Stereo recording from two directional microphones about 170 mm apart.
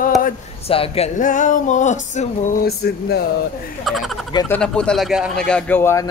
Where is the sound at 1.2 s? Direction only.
50° left (ahead or behind).